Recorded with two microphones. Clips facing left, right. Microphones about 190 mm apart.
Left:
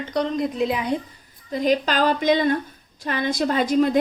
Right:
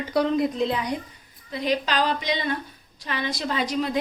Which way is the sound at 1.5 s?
45° left (ahead or behind).